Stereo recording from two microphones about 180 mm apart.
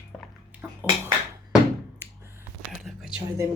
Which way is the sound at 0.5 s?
10° right (ahead or behind).